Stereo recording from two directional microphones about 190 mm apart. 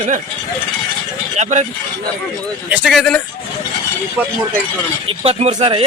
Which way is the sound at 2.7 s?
Centre (ahead or behind).